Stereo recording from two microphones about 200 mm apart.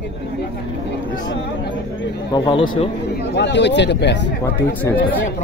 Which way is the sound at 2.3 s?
25° left (ahead or behind).